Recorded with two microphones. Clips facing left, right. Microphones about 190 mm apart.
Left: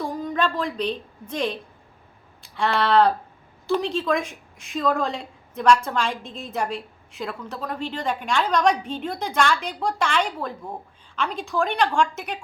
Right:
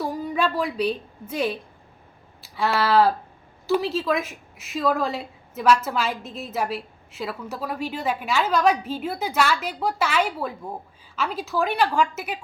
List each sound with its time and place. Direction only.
0.0 s a woman's voice: 10° right (ahead or behind)
2.4 s a sound: 5° right (ahead or behind)
3.7 s a woman's voice: 5° right (ahead or behind)